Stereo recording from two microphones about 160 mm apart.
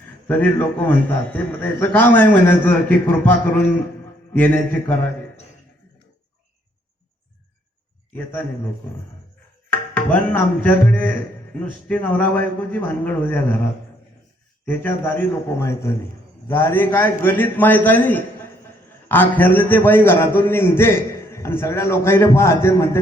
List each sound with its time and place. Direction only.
0.3 s a man's voice: 10° left (ahead or behind)
8.1 s a man's voice: 15° left (ahead or behind)
9.6 s music: 10° left (ahead or behind)
11.6 s a man's voice: 10° left (ahead or behind)
14.6 s a man's voice: 15° left (ahead or behind)